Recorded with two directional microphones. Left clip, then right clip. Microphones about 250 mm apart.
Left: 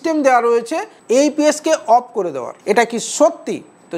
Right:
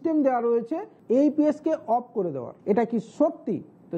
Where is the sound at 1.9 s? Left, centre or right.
Centre.